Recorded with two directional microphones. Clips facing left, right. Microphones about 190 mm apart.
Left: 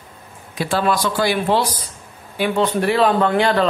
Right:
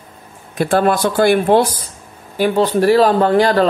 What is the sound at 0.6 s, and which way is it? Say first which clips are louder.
Speech: right 5 dB; 55° right (ahead or behind).